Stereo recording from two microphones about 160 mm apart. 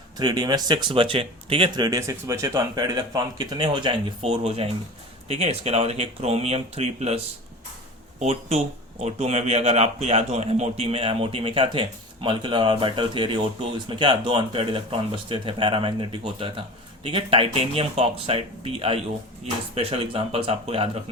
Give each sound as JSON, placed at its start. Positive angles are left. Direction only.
{"t": 0.2, "sound": "speech", "side_deg": -25}
{"t": 8.2, "sound": "speech", "side_deg": -40}